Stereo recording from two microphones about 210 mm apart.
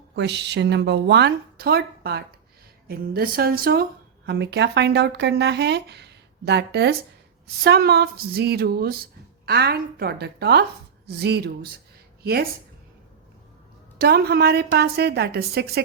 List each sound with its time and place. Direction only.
0.2 s a woman's voice: 55° right (ahead or behind)
14.0 s speech: 50° right (ahead or behind)